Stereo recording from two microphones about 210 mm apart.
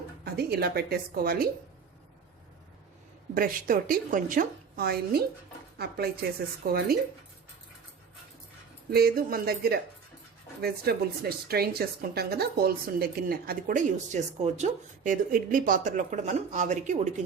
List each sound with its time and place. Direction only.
0.5 s a woman's voice: 50° right (ahead or behind)
3.3 s a woman's voice: 45° right (ahead or behind)
8.9 s a woman's voice: 45° right (ahead or behind)